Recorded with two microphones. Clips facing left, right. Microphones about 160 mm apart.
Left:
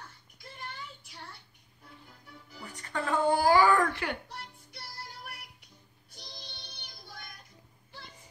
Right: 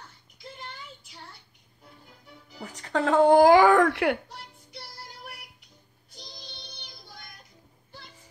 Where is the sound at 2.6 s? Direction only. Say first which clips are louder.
Right 8 dB; 85° right; by 4.2 s 70° right (ahead or behind).